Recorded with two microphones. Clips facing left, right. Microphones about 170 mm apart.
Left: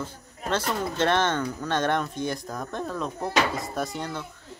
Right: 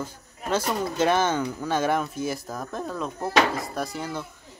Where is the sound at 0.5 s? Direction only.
10° right (ahead or behind).